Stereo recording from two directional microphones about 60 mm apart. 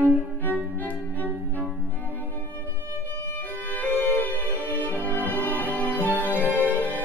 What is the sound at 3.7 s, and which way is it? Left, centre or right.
Music, left.